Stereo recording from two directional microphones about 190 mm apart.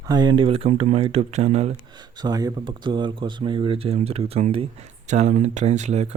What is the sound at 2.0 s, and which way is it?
Speech, 20° right (ahead or behind).